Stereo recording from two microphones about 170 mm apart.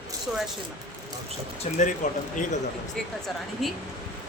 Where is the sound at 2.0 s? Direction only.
45° left (ahead or behind).